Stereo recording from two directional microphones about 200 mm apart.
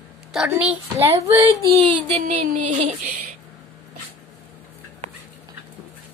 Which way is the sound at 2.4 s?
40° right (ahead or behind).